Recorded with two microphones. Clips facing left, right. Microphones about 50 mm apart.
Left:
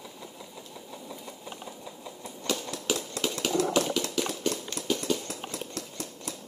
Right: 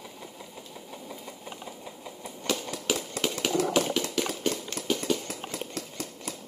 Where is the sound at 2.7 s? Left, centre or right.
Right.